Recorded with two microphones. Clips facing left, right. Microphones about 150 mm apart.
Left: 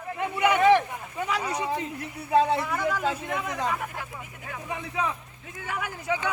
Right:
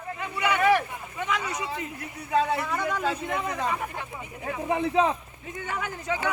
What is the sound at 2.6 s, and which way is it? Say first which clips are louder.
A man's voice: left 1 dB; 5° left (ahead or behind).